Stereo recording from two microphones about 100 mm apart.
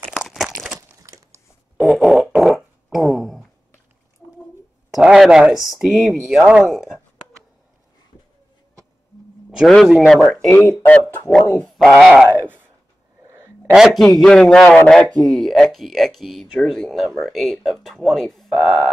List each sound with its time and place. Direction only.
0.2 s crumpling: 5° right (ahead or behind)
0.7 s crumpling: 35° right (ahead or behind)
1.8 s fart: centre (ahead or behind)
4.9 s speech: 5° right (ahead or behind)
9.8 s speech: centre (ahead or behind)
10.5 s speech: 20° left (ahead or behind)
11.6 s speech: centre (ahead or behind)
12.4 s a sound: 20° right (ahead or behind)
13.7 s speech: centre (ahead or behind)